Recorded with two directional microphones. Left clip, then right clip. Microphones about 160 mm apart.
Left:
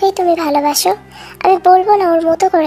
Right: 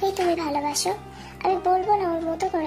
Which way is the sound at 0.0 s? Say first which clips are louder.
Left 11 dB; 40° left (ahead or behind).